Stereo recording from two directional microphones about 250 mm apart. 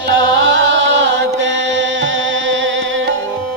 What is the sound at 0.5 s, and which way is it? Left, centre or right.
Music, right.